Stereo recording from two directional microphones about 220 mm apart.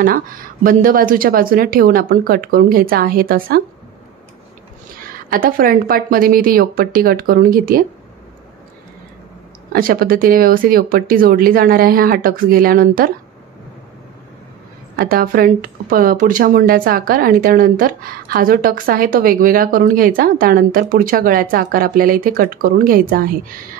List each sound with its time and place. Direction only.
0.0 s speech: 40° right (ahead or behind)
5.3 s speech: 40° right (ahead or behind)
9.7 s speech: 40° right (ahead or behind)
15.0 s speech: 40° right (ahead or behind)